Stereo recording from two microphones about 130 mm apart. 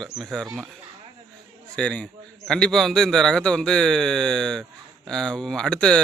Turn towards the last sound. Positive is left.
turn(degrees=5)  # may be behind; listen again after turning